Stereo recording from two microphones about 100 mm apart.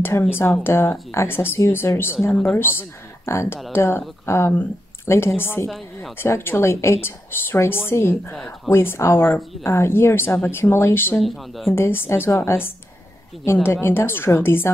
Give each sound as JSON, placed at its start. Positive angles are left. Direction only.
{"t": 0.0, "sound": "speech", "side_deg": 25}
{"t": 5.7, "sound": "speech", "side_deg": 0}
{"t": 6.1, "sound": "speech", "side_deg": 25}
{"t": 11.1, "sound": "speech", "side_deg": 0}
{"t": 11.7, "sound": "speech", "side_deg": 25}